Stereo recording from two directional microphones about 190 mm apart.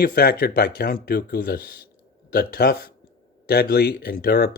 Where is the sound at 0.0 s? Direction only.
55° left (ahead or behind).